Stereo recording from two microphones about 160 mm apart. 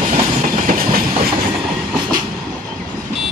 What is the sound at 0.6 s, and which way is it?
Train, 65° right (ahead or behind).